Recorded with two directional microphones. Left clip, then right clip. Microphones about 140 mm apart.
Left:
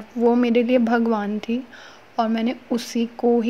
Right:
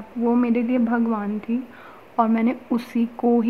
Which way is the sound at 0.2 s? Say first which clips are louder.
Left 4 dB; 30° left (ahead or behind).